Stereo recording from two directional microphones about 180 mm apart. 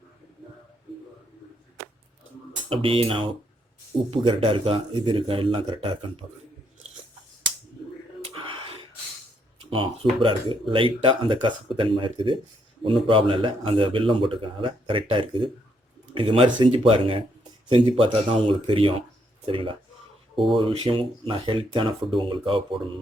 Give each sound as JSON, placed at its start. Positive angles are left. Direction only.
{"t": 2.6, "sound": "speech", "side_deg": -30}
{"t": 9.6, "sound": "speech", "side_deg": -30}